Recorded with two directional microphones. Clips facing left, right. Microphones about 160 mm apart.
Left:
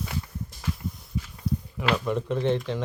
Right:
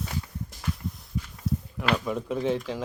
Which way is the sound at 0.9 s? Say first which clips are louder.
Left 1 dB; centre (ahead or behind).